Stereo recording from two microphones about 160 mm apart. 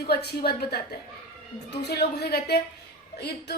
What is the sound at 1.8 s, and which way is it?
Speech, 85° left.